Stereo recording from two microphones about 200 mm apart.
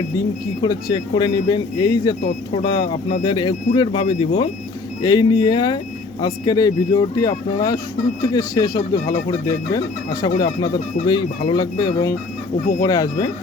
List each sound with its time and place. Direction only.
0.6 s speech: 20° left (ahead or behind)